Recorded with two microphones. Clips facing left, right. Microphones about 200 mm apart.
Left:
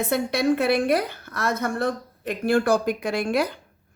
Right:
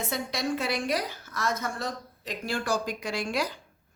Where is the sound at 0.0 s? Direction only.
60° left (ahead or behind).